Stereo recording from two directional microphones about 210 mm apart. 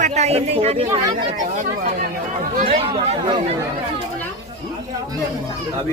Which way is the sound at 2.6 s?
30° right (ahead or behind).